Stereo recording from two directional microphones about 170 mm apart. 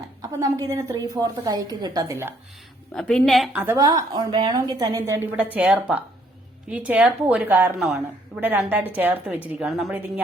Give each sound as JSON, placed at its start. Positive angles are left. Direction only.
{"t": 0.2, "sound": "a woman's voice", "side_deg": -20}
{"t": 2.9, "sound": "a woman's voice", "side_deg": 5}
{"t": 3.5, "sound": "a woman's voice", "side_deg": -10}
{"t": 3.8, "sound": "a woman's voice", "side_deg": -20}